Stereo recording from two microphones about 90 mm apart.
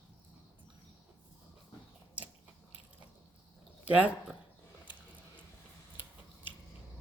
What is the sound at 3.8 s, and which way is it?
Speech, 15° right (ahead or behind).